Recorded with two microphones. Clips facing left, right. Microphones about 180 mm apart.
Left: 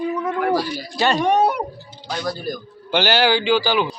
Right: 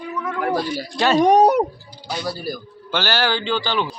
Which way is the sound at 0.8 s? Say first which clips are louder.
Right 3 dB; centre (ahead or behind).